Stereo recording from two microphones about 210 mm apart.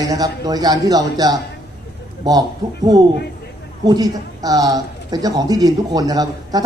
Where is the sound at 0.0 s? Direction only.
15° right (ahead or behind).